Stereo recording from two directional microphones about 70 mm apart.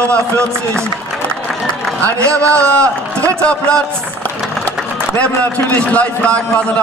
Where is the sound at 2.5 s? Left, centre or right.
Centre.